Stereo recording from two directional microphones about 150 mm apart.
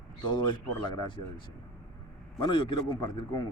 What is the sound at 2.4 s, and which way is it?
Speech, 30° left (ahead or behind).